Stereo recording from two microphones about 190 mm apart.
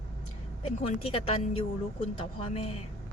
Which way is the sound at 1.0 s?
30° left (ahead or behind).